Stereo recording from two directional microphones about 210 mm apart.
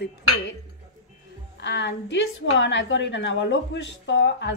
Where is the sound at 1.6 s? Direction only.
55° left (ahead or behind).